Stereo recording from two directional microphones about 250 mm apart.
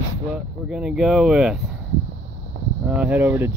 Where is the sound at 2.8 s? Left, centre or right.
Centre.